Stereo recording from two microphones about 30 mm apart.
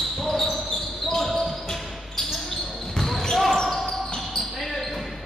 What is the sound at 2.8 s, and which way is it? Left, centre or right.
Basketball bounce, centre.